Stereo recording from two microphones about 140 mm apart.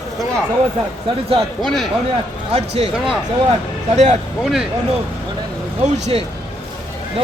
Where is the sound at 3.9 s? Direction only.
55° right (ahead or behind).